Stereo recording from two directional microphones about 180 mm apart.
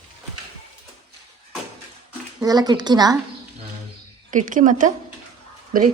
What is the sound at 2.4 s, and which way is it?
Speech, 20° right (ahead or behind).